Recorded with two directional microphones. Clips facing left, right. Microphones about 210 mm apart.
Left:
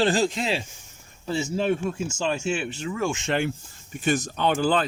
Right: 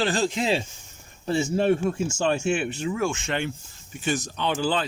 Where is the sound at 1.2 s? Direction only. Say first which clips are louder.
Right 3 dB; 55° right (ahead or behind).